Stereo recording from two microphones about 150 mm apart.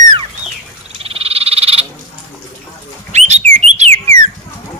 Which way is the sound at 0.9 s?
40° right (ahead or behind).